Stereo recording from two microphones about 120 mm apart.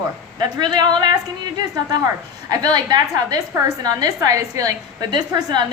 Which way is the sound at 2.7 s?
35° right (ahead or behind).